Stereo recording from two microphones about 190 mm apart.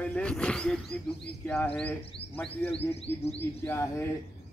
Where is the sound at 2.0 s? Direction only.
30° left (ahead or behind).